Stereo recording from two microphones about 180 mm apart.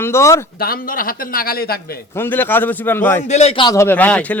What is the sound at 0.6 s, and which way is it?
A man's voice, 55° left (ahead or behind).